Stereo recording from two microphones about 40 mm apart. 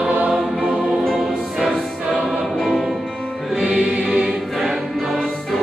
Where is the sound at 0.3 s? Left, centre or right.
Centre.